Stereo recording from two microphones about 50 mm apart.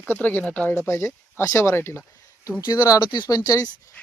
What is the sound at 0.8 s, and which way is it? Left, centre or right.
Speech, left.